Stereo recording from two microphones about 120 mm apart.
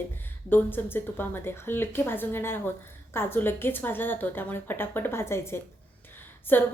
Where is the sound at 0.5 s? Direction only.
15° left (ahead or behind).